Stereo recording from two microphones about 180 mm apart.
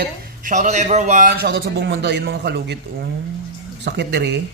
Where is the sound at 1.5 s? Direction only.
65° right (ahead or behind).